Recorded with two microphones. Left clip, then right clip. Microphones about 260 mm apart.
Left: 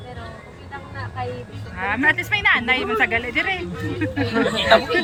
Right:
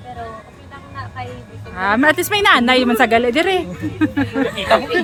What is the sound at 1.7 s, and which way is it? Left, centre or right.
Speech, right.